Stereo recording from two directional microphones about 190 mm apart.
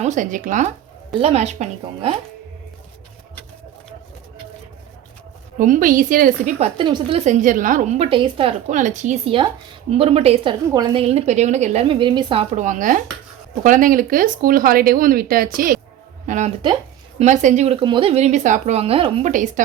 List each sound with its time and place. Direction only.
0.0 s a woman's voice: 40° right (ahead or behind)
5.5 s speech: 45° right (ahead or behind)
6.7 s a woman's voice: 25° right (ahead or behind); by 19.6 s 40° right (ahead or behind)